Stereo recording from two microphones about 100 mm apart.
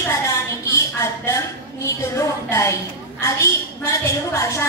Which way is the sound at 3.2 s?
30° left (ahead or behind).